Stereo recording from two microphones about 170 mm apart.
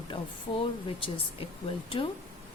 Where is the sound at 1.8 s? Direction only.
30° left (ahead or behind).